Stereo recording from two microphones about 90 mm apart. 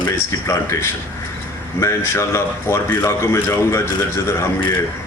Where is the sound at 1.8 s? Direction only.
30° left (ahead or behind).